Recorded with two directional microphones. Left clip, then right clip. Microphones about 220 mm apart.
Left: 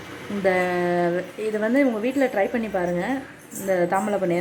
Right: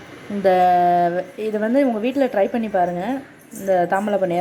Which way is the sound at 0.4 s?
10° right (ahead or behind).